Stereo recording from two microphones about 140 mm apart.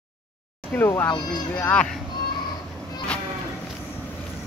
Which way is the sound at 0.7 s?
15° left (ahead or behind).